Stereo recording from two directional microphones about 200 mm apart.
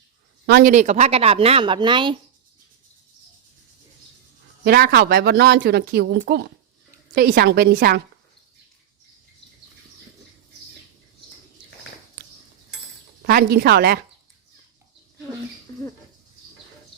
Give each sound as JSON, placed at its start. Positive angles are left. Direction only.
{"t": 0.4, "sound": "speech", "side_deg": -55}
{"t": 0.7, "sound": "speech", "side_deg": -35}
{"t": 4.6, "sound": "a woman's voice", "side_deg": -50}
{"t": 13.2, "sound": "a woman's voice", "side_deg": -50}